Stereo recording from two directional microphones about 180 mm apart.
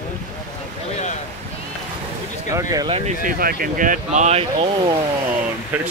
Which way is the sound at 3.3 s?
55° right (ahead or behind).